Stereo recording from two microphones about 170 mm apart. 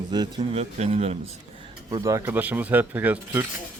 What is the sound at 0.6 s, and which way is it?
Speech, 40° right (ahead or behind).